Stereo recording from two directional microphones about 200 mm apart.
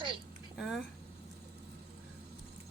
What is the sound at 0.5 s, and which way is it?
Speech, centre (ahead or behind).